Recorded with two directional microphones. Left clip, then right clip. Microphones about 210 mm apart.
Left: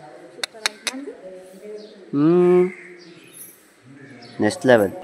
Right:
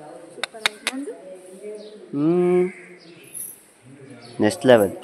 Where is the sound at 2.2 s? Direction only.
10° left (ahead or behind).